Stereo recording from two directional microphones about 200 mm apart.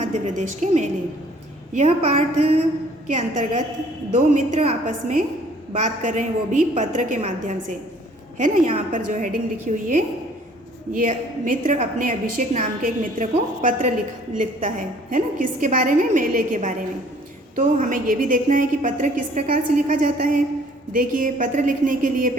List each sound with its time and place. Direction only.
0.0 s a woman's voice: 35° right (ahead or behind)